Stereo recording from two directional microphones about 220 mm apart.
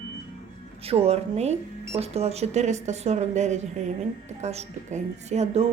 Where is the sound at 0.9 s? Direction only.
25° right (ahead or behind).